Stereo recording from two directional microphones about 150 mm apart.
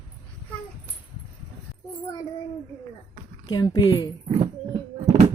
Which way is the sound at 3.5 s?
30° left (ahead or behind).